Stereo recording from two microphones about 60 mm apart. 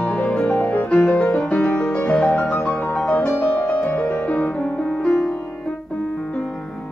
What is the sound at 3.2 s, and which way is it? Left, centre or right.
Music, left.